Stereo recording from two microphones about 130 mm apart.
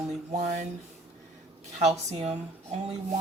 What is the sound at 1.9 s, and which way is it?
Speech, 55° right (ahead or behind).